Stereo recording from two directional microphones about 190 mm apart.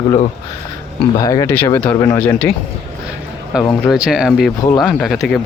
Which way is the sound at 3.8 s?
5° right (ahead or behind).